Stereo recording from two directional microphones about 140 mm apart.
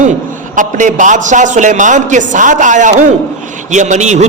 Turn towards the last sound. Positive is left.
turn(degrees=-55)  # may be behind; listen again after turning